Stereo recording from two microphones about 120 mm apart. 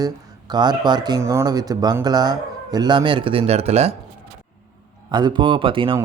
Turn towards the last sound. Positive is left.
turn(degrees=-45)  # may be behind; listen again after turning